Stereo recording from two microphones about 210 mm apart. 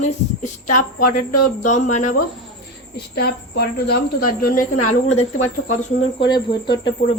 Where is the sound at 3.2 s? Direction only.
50° left (ahead or behind).